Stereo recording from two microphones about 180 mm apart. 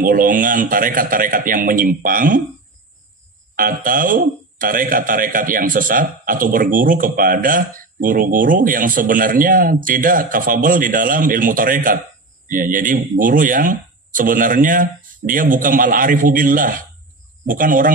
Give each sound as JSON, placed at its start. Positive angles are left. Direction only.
{"t": 0.0, "sound": "speech", "side_deg": -50}
{"t": 3.5, "sound": "speech", "side_deg": -50}